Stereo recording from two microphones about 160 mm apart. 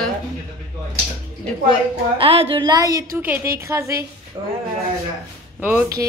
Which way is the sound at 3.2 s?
15° right (ahead or behind).